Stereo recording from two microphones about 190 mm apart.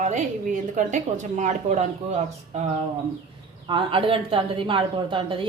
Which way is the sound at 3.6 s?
25° right (ahead or behind).